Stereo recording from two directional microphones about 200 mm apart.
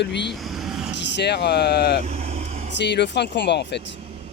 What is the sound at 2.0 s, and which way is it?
Vehicle, 30° right (ahead or behind).